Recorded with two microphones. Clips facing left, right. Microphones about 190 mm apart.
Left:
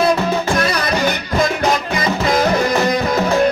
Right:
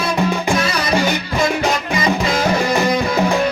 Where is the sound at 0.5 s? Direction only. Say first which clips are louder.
Left 1 dB; 55° left (ahead or behind).